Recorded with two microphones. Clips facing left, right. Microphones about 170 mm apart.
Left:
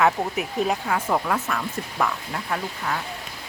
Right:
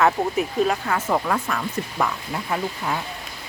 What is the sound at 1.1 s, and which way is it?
Speech, centre (ahead or behind).